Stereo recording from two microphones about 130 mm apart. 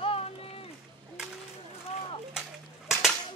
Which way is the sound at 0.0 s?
45° left (ahead or behind).